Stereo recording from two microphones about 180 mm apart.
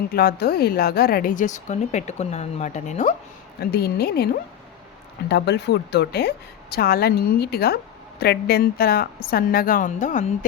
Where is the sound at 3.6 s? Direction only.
60° left (ahead or behind).